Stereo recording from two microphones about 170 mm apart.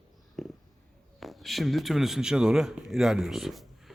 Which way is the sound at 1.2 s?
Centre (ahead or behind).